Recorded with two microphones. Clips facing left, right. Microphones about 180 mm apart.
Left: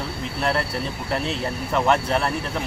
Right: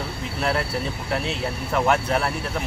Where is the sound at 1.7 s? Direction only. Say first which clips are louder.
Left 1 dB; 5° right (ahead or behind).